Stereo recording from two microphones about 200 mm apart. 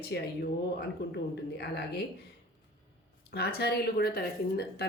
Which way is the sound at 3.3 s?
55° left (ahead or behind).